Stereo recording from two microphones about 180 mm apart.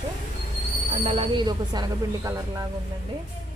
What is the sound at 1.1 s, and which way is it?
Speech, 25° right (ahead or behind).